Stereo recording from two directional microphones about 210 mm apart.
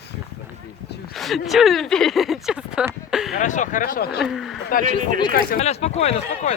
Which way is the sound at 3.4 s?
35° left (ahead or behind).